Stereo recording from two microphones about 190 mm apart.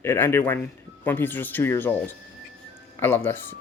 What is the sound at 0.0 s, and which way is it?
Speech, 10° left (ahead or behind).